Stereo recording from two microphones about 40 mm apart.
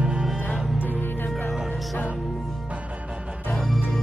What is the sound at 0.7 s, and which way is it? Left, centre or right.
Music, left.